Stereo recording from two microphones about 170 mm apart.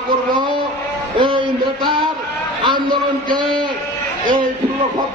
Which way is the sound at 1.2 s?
25° right (ahead or behind).